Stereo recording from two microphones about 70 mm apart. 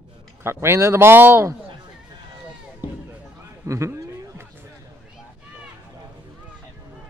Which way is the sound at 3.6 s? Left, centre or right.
Right.